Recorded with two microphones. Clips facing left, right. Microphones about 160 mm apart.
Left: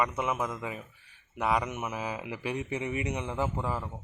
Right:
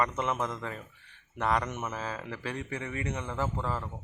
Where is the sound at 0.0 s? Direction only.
10° left (ahead or behind).